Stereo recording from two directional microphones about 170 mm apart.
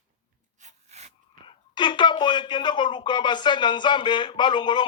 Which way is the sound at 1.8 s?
25° left (ahead or behind).